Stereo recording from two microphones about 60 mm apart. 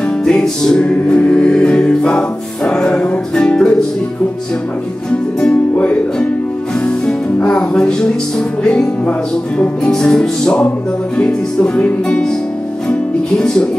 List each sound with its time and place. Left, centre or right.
0.2 s music: centre
5.4 s music: centre
7.3 s music: left